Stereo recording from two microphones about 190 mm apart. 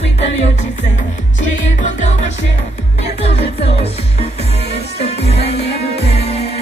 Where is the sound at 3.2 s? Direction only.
30° left (ahead or behind).